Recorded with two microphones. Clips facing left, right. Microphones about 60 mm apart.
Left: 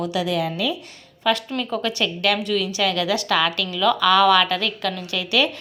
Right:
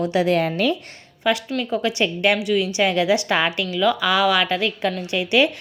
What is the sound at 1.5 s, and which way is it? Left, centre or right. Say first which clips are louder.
Speech: right 2 dB; centre.